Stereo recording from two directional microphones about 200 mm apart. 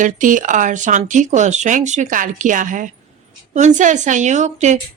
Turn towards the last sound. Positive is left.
turn(degrees=-35)  # may be behind; listen again after turning